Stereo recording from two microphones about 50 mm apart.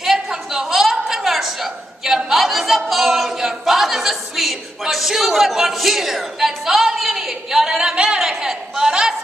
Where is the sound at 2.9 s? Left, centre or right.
Centre.